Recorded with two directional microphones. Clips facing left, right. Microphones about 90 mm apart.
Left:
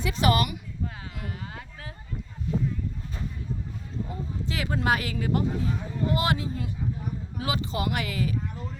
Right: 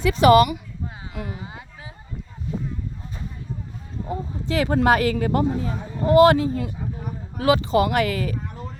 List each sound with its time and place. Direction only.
0.0 s speech: 65° right (ahead or behind)
1.3 s a sound: 15° right (ahead or behind)
4.4 s a man's voice: 40° right (ahead or behind); by 6.7 s 60° right (ahead or behind)
7.3 s speech: 70° right (ahead or behind); by 8.6 s 55° right (ahead or behind)